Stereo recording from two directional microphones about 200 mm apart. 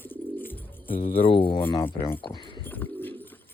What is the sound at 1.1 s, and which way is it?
Speech, 25° left (ahead or behind).